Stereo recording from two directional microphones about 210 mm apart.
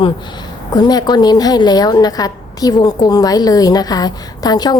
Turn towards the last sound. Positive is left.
turn(degrees=20)  # may be behind; listen again after turning